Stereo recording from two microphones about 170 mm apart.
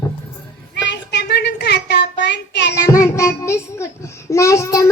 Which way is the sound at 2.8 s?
15° left (ahead or behind).